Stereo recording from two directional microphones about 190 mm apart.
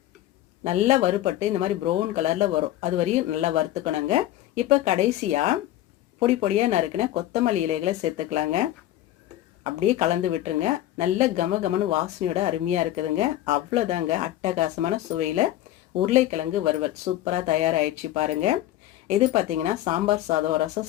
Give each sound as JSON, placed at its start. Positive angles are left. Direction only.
{"t": 0.6, "sound": "speech", "side_deg": -35}
{"t": 9.8, "sound": "speech", "side_deg": -35}